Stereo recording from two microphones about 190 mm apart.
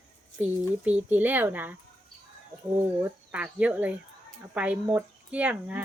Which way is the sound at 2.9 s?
5° right (ahead or behind).